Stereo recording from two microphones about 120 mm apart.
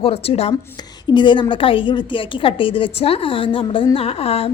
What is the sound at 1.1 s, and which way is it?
A woman's voice, 40° left (ahead or behind).